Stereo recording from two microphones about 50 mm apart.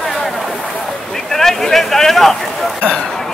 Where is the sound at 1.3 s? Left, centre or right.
Centre.